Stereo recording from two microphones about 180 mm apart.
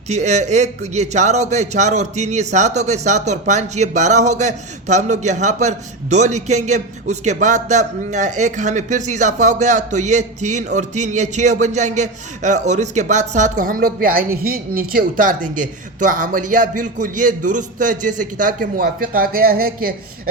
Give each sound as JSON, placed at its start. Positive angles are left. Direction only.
{"t": 0.1, "sound": "a man's voice", "side_deg": -40}